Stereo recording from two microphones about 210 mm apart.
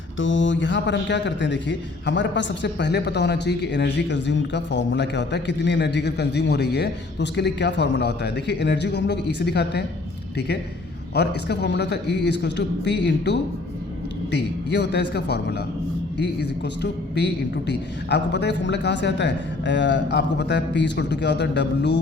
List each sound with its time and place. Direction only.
0.2 s a man's voice: 65° left (ahead or behind)
11.1 s a man's voice: 55° left (ahead or behind)